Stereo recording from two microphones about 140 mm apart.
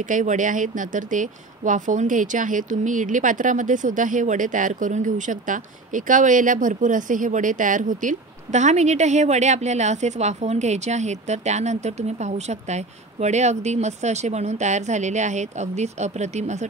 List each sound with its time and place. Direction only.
0.0 s speech: 65° right (ahead or behind)